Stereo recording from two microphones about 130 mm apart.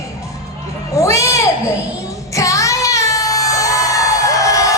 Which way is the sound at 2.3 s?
25° left (ahead or behind).